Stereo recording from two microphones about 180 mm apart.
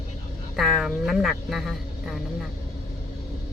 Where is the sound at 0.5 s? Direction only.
Centre (ahead or behind).